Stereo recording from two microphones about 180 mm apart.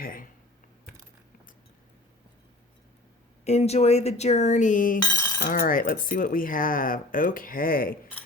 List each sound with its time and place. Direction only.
0.0 s speech: 50° left (ahead or behind)
3.4 s speech: 35° left (ahead or behind)
5.1 s chink: 15° left (ahead or behind)
5.4 s speech: 55° left (ahead or behind)